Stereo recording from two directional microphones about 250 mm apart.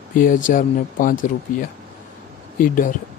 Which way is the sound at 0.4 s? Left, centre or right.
Left.